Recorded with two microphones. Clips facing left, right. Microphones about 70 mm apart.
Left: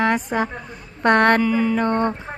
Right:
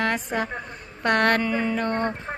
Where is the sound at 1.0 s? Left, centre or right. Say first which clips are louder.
Left 5 dB; left.